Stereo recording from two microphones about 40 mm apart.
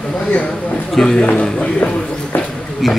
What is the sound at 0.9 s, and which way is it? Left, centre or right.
Speech, centre.